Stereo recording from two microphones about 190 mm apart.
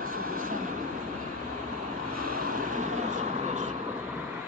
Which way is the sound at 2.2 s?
45° right (ahead or behind).